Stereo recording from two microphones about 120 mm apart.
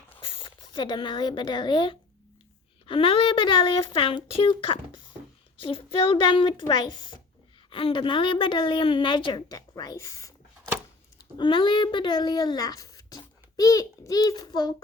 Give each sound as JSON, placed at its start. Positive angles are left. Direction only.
{"t": 0.2, "sound": "a woman's voice", "side_deg": 45}
{"t": 7.7, "sound": "a woman's voice", "side_deg": 45}
{"t": 11.3, "sound": "a child's voice", "side_deg": 40}